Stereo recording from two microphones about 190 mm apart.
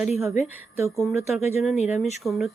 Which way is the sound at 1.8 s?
35° left (ahead or behind).